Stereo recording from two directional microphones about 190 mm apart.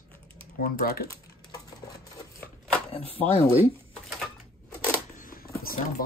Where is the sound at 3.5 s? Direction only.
5° right (ahead or behind).